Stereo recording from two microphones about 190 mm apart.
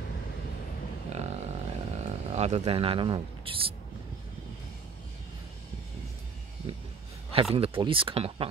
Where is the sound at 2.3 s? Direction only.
35° right (ahead or behind).